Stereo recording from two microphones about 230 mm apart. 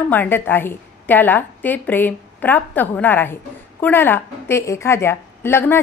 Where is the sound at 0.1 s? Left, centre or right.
Centre.